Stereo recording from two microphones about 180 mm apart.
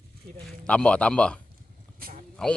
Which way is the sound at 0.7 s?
5° left (ahead or behind).